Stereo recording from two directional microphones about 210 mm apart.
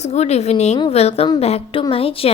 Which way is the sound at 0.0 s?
30° left (ahead or behind).